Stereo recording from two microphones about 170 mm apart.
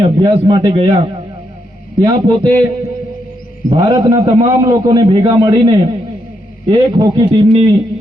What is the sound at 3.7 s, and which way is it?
A man's voice, 25° right (ahead or behind).